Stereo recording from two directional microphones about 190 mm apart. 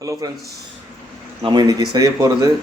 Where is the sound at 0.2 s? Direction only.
20° right (ahead or behind).